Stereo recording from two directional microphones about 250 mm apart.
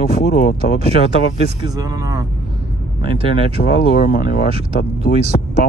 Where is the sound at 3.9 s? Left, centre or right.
Left.